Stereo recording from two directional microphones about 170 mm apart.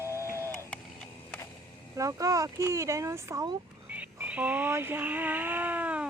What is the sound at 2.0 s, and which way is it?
Speech, 20° right (ahead or behind).